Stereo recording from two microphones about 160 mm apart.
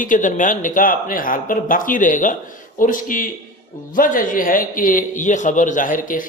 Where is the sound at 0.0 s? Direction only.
55° left (ahead or behind).